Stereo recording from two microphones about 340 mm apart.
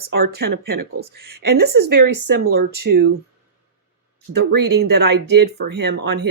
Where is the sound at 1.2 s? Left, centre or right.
Right.